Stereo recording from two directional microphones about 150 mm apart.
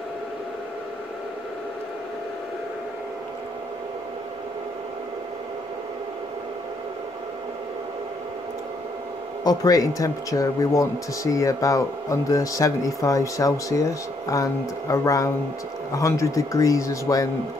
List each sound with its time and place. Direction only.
9.4 s a man's voice: 25° left (ahead or behind)